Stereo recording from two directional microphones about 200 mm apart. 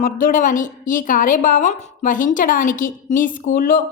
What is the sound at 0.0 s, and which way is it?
A woman's voice, 40° left (ahead or behind).